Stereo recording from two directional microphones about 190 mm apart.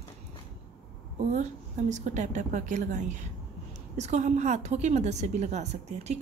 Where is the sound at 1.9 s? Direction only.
40° right (ahead or behind).